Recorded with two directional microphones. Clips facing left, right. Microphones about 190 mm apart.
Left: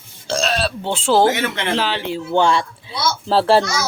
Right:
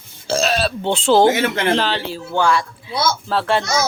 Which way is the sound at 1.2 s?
30° right (ahead or behind).